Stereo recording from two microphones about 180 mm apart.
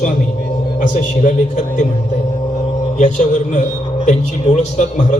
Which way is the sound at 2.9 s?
40° left (ahead or behind).